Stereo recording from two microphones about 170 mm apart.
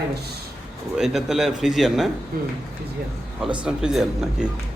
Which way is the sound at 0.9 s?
Centre (ahead or behind).